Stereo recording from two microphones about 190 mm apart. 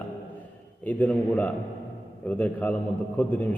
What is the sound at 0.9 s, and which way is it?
A man's voice, 10° left (ahead or behind).